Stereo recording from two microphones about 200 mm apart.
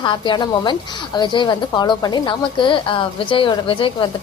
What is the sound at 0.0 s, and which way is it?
A woman's voice, 25° left (ahead or behind).